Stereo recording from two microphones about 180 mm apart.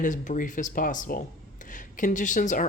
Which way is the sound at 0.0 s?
45° left (ahead or behind).